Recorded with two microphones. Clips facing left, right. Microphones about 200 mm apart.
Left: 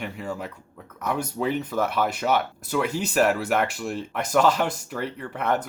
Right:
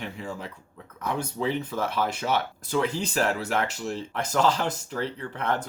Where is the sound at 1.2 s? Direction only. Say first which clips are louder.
Left 2 dB; 10° left (ahead or behind).